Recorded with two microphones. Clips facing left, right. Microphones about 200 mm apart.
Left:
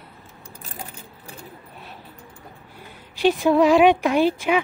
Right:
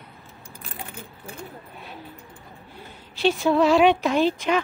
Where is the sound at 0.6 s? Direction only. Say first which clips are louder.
Right 1 dB; 40° left (ahead or behind).